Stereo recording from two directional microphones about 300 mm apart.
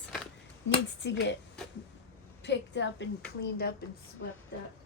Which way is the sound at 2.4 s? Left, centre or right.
Left.